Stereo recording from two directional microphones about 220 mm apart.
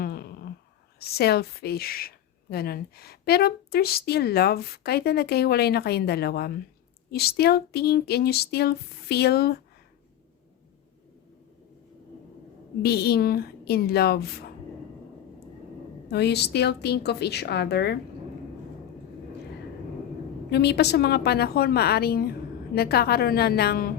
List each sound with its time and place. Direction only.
0.0 s a sound: 45° left (ahead or behind)
0.9 s a woman's voice: 45° left (ahead or behind)
12.8 s a woman's voice: 45° left (ahead or behind)
16.0 s a woman's voice: 50° left (ahead or behind)
20.5 s a woman's voice: 50° left (ahead or behind)